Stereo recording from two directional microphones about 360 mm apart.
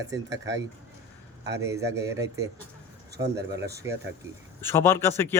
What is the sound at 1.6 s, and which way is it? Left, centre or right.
Speech, centre.